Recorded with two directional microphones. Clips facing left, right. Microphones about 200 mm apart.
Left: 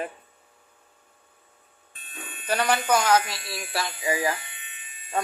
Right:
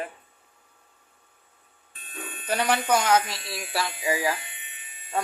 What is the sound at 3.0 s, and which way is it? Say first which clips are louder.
Speech: left 1 dB; 20° right (ahead or behind).